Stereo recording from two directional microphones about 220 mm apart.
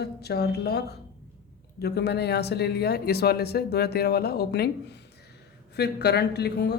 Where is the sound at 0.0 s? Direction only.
45° left (ahead or behind).